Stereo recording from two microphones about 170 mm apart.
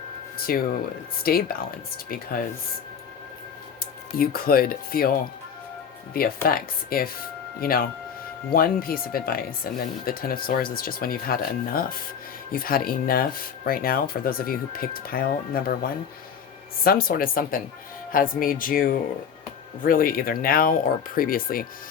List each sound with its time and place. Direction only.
0.3 s speech: 60° left (ahead or behind)
4.2 s speech: 60° left (ahead or behind)
6.1 s speech: 60° left (ahead or behind)